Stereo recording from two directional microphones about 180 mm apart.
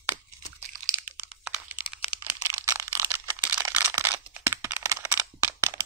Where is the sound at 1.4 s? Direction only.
10° right (ahead or behind).